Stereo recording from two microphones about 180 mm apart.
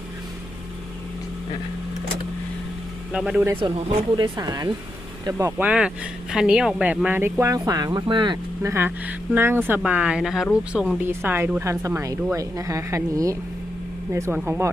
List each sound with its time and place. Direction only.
3.1 s speech: 5° right (ahead or behind)
3.6 s speech: 25° right (ahead or behind)